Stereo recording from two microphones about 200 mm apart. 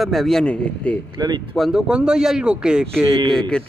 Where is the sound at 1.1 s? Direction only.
20° right (ahead or behind).